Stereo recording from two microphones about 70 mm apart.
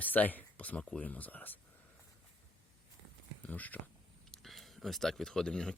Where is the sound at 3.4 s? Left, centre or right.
Left.